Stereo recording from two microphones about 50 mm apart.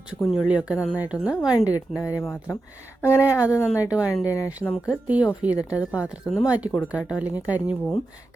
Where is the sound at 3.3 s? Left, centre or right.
Right.